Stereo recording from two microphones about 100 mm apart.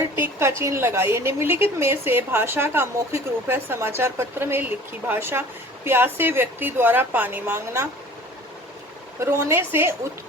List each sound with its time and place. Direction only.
0.0 s a woman's voice: 25° right (ahead or behind)
9.2 s a woman's voice: 25° right (ahead or behind)